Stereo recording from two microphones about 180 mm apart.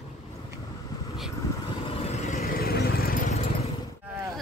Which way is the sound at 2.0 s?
40° left (ahead or behind).